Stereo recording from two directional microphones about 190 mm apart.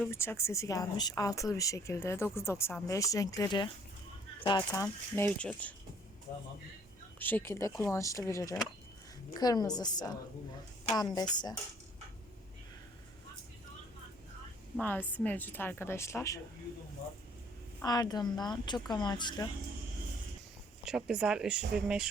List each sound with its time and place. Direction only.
0.1 s speech: 15° left (ahead or behind)
7.2 s speech: 10° left (ahead or behind)
14.8 s speech: 10° left (ahead or behind)
17.8 s speech: 20° left (ahead or behind)
20.8 s speech: 5° right (ahead or behind)